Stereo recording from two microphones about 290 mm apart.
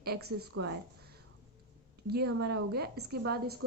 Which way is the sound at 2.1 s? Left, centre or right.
Right.